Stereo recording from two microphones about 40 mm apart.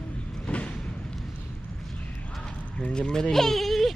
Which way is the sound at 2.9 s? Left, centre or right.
Centre.